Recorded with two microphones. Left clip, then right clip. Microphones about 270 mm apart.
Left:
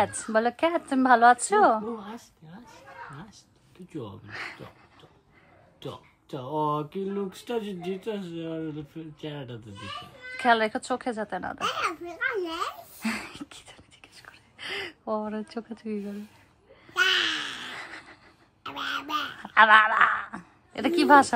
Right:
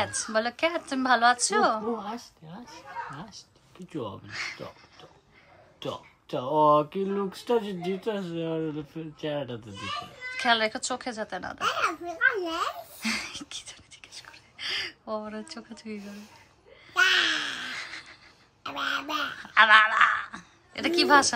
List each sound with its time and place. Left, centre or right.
0.0 s a woman's voice: centre
2.0 s a woman's voice: right
4.3 s a woman's voice: centre
5.8 s speech: right
10.3 s a woman's voice: centre
11.6 s a child's voice: centre
13.0 s whispering: centre
16.9 s a sound: centre
17.7 s a sound: centre
18.6 s speech: centre
19.4 s a woman's voice: centre